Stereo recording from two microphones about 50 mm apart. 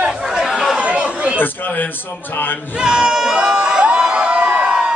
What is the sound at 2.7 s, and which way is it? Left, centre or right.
Crowd, centre.